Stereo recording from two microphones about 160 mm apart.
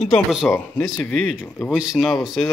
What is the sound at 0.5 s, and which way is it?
Speech, 15° left (ahead or behind).